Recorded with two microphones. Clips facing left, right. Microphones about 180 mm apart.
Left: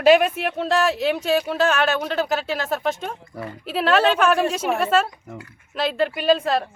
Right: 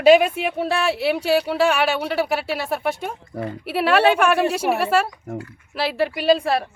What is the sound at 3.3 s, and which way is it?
Speech, 45° right (ahead or behind).